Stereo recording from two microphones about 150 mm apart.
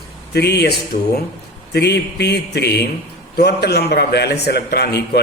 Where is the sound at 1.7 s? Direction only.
90° left.